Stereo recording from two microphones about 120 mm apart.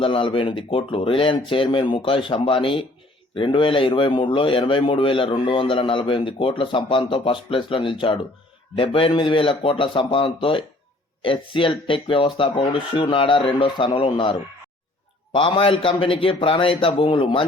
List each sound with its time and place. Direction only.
0.0 s a man's voice: 50° left (ahead or behind)
15.4 s a man's voice: 45° left (ahead or behind)